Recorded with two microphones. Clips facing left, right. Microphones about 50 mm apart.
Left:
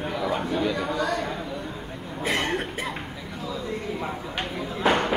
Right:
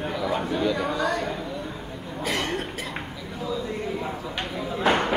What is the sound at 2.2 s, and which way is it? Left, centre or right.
Speech, left.